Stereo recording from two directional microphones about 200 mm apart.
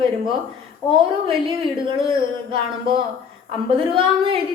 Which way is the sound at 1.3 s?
25° right (ahead or behind).